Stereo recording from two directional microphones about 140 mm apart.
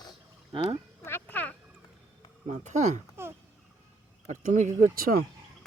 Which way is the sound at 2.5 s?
55° right (ahead or behind).